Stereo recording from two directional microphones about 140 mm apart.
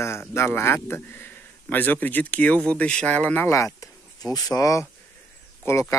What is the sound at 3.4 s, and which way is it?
Speech, 20° left (ahead or behind).